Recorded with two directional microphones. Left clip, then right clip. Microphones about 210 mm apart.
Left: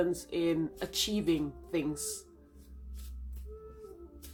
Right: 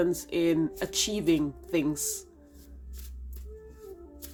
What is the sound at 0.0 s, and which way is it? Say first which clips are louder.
Speech: right 4 dB; 30° right (ahead or behind).